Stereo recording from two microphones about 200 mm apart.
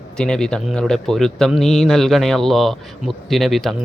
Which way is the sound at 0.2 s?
5° left (ahead or behind).